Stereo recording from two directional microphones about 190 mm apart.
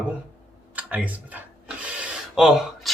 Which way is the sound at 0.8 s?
10° right (ahead or behind).